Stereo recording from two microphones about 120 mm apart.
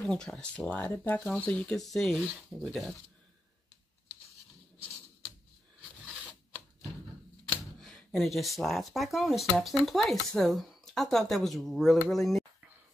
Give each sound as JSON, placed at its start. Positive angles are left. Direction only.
{"t": 0.0, "sound": "speech", "side_deg": 5}
{"t": 7.8, "sound": "speech", "side_deg": 5}